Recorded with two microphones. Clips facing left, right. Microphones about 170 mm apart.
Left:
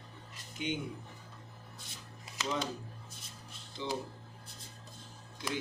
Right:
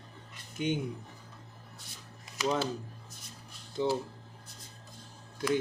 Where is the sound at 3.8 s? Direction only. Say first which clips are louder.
Right 9 dB; 50° right (ahead or behind).